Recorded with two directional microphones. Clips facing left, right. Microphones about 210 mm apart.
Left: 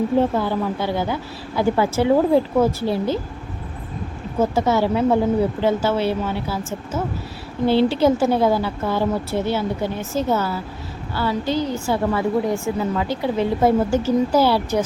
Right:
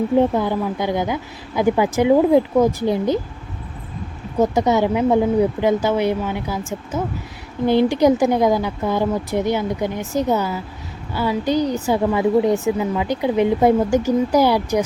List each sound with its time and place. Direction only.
0.2 s a woman's voice: 15° right (ahead or behind)
4.4 s a woman's voice: 15° right (ahead or behind)